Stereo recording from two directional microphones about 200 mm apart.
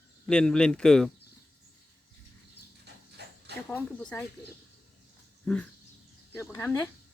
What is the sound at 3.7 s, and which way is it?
Speech, 10° left (ahead or behind).